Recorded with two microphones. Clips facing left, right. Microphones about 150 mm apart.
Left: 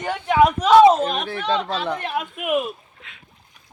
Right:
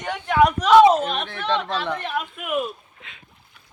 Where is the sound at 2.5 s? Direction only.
5° left (ahead or behind).